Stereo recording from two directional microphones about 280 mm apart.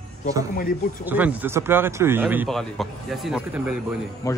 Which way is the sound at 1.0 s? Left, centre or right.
Centre.